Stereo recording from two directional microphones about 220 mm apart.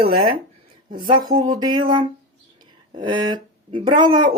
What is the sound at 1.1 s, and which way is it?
Speech, 20° right (ahead or behind).